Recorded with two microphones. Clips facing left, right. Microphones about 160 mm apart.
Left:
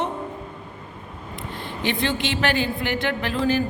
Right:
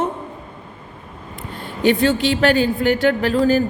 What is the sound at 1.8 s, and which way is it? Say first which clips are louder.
A woman's voice: right 9 dB; 40° right (ahead or behind).